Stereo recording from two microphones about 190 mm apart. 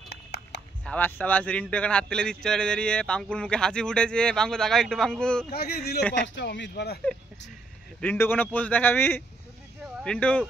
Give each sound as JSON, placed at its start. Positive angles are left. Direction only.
{"t": 0.1, "sound": "a sound", "side_deg": 60}
{"t": 0.8, "sound": "speech", "side_deg": 10}
{"t": 5.5, "sound": "speech", "side_deg": 55}
{"t": 6.2, "sound": "speech", "side_deg": 70}
{"t": 8.0, "sound": "a man's voice", "side_deg": 10}